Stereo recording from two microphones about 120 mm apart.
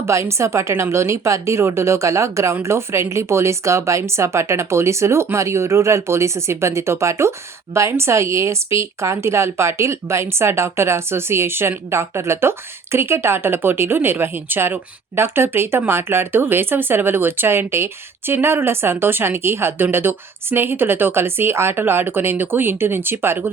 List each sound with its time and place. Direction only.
0.0 s a woman's voice: 25° right (ahead or behind)